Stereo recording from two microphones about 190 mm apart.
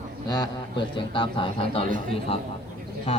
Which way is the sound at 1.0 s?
25° left (ahead or behind).